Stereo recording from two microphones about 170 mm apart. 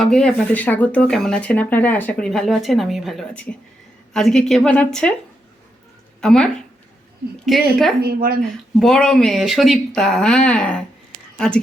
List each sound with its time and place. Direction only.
0.0 s speech: 5° left (ahead or behind)
6.2 s speech: 5° left (ahead or behind)
8.0 s a woman's voice: 60° right (ahead or behind)
8.8 s speech: 5° left (ahead or behind)